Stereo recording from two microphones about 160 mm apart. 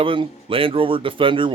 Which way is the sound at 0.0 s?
35° right (ahead or behind).